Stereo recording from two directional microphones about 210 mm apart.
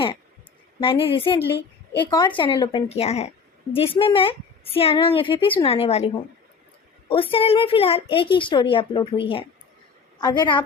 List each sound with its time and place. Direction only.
0.8 s a woman's voice: 25° left (ahead or behind)
7.1 s a woman's voice: 25° left (ahead or behind)